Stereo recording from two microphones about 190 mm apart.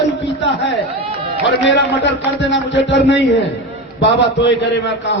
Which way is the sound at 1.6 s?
70° left (ahead or behind).